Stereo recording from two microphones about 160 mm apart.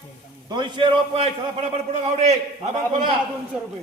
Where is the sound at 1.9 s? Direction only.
45° right (ahead or behind).